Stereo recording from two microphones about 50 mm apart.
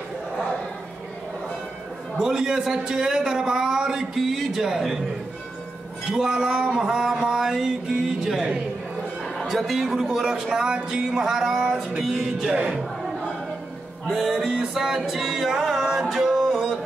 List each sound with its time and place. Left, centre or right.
2.2 s a man's voice: centre
6.0 s a man's voice: centre
9.2 s a man's voice: centre
12.5 s speech: right
14.0 s music: centre